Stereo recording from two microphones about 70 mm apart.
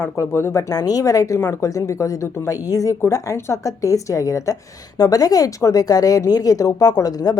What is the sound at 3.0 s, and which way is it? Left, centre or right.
Speech, left.